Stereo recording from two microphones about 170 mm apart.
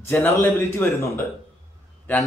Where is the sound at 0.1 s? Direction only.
10° left (ahead or behind).